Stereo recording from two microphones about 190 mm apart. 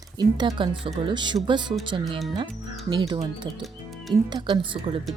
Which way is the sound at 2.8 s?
25° right (ahead or behind).